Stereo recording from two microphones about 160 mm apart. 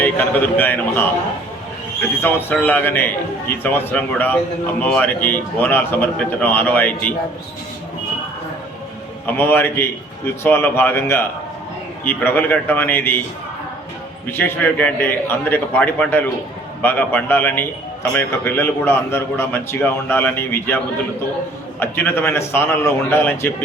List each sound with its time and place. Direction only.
0.0 s a man's voice: 10° left (ahead or behind)
9.2 s a man's voice: 15° left (ahead or behind)
14.3 s a man's voice: 15° left (ahead or behind)